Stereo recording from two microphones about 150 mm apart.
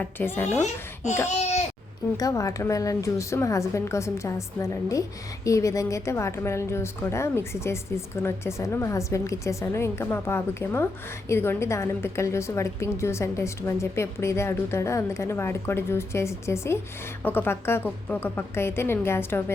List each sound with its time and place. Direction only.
0.0 s a woman's voice: 15° left (ahead or behind)
1.3 s babbling: 50° left (ahead or behind)
2.1 s a woman's voice: 20° left (ahead or behind)